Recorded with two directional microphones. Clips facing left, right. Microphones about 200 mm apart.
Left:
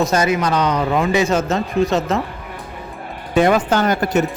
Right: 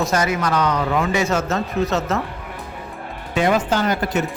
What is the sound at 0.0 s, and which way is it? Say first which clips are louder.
A man's voice: left 3 dB; 20° left (ahead or behind).